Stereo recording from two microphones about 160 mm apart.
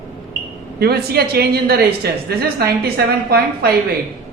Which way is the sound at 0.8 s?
75° right (ahead or behind).